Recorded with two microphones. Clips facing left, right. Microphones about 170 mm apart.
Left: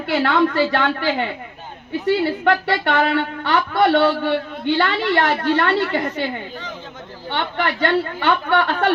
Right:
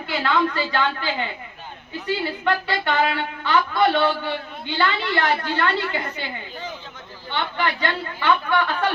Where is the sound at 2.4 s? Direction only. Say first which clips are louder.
Left 5 dB; 70° left (ahead or behind).